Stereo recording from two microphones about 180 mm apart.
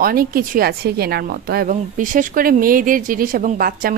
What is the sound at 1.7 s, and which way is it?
Speech, 45° right (ahead or behind).